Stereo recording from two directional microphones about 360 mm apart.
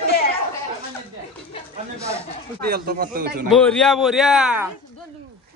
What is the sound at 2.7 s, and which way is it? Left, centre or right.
Speech, right.